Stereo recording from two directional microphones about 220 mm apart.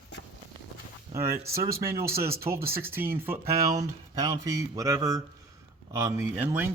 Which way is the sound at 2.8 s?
10° right (ahead or behind).